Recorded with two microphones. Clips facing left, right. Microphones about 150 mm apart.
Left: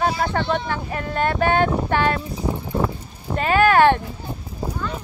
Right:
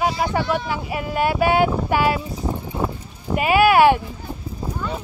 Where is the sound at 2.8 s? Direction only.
10° right (ahead or behind).